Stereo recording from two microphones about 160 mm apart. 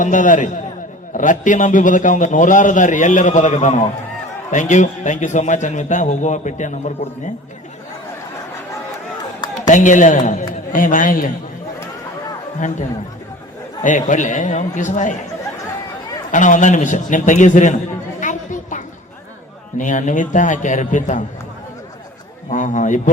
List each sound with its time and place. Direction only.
0.0 s a man's voice: 55° left (ahead or behind)
9.6 s a man's voice: 50° left (ahead or behind)
12.5 s a man's voice: 50° left (ahead or behind)
13.8 s a man's voice: 50° left (ahead or behind)
16.3 s a man's voice: 50° left (ahead or behind)
18.2 s a sound: 50° left (ahead or behind)
19.7 s a man's voice: 50° left (ahead or behind)
22.4 s a man's voice: 50° left (ahead or behind)